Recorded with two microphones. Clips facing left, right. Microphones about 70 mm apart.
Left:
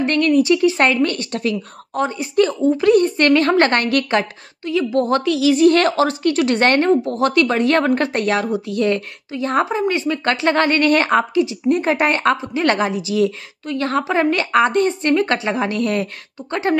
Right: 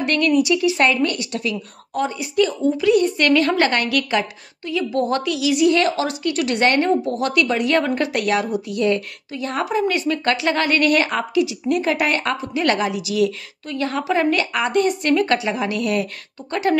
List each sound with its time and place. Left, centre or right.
0.0 s a woman's voice: left
4.6 s a woman's voice: left